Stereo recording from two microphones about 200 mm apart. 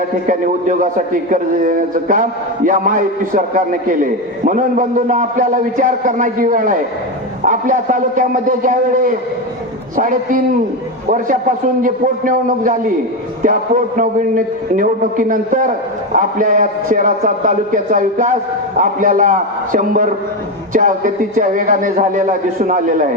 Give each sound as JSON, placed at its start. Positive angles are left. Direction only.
{"t": 0.3, "sound": "a man's voice", "side_deg": -40}
{"t": 11.8, "sound": "a man's voice", "side_deg": -45}